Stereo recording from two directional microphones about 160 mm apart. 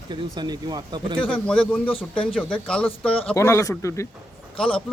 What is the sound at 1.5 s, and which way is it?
Speech, 5° left (ahead or behind).